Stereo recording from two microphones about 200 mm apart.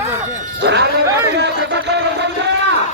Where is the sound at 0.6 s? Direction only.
60° right (ahead or behind).